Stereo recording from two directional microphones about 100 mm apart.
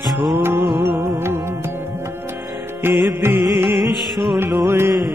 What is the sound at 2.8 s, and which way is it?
Music, 25° right (ahead or behind).